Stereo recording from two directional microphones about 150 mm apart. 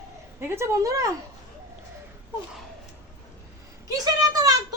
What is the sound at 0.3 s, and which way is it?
Speech, 15° right (ahead or behind).